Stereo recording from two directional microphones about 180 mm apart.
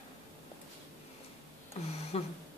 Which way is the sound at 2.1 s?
35° left (ahead or behind).